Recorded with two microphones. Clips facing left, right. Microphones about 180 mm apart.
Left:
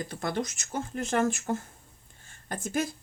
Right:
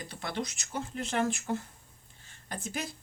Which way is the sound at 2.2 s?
50° left (ahead or behind).